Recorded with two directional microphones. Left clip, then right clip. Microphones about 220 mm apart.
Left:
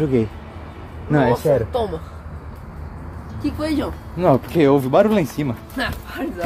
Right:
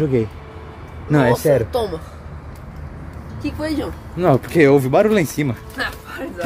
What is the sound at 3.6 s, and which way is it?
Speech, centre (ahead or behind).